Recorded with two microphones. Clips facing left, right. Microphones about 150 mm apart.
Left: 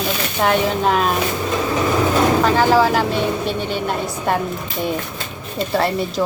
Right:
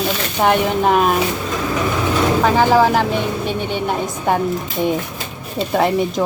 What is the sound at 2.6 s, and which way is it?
Speech, 15° right (ahead or behind).